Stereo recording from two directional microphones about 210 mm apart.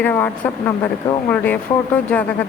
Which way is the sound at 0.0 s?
10° left (ahead or behind).